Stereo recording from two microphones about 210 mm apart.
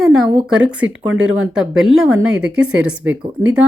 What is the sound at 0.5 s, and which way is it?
Speech, 5° right (ahead or behind).